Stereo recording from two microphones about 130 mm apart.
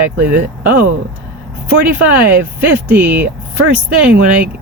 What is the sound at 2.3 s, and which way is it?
Speech, 15° right (ahead or behind).